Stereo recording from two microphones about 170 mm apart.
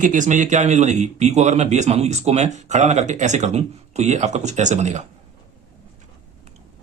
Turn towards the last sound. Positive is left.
turn(degrees=-45)  # may be behind; listen again after turning